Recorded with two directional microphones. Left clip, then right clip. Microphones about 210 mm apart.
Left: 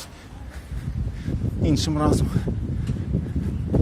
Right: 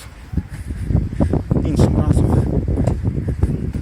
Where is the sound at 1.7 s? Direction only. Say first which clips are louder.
Right 1 dB; 25° left (ahead or behind).